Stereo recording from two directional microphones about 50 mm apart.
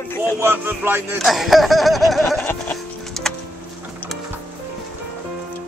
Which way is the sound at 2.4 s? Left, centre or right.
Left.